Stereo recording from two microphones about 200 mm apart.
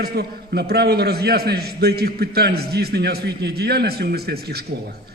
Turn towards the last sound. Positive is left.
turn(degrees=-50)  # may be behind; listen again after turning